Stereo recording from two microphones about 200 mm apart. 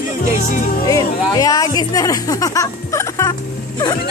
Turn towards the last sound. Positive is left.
turn(degrees=15)  # may be behind; listen again after turning